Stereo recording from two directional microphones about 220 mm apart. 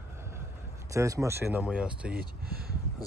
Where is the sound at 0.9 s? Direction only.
15° right (ahead or behind).